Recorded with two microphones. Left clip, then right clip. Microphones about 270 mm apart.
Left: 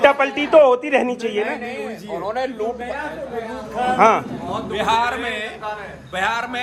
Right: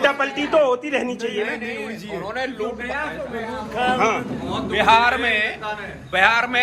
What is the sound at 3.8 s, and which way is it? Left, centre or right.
Speech, left.